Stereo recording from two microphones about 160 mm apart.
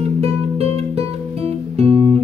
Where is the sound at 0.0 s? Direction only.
40° right (ahead or behind).